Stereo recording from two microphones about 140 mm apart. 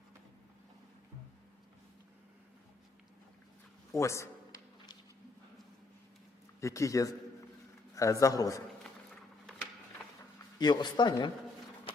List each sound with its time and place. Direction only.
3.9 s a sound: 20° left (ahead or behind)
6.6 s a man's voice: 20° left (ahead or behind)
10.6 s speech: 30° left (ahead or behind)